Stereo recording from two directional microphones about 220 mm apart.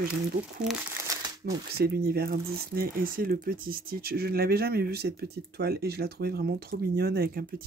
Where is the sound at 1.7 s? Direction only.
45° right (ahead or behind).